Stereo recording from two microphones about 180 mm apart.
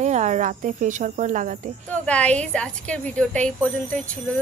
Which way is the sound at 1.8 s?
5° left (ahead or behind).